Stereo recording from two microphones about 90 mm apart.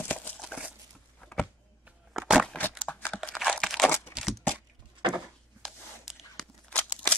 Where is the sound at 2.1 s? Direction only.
5° right (ahead or behind).